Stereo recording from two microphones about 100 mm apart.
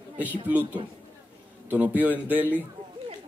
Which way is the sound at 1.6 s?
15° right (ahead or behind).